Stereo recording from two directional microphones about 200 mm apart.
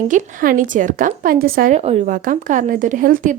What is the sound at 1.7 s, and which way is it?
A woman's voice, 35° right (ahead or behind).